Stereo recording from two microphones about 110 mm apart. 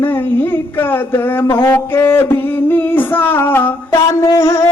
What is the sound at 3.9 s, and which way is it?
Speech, 30° left (ahead or behind).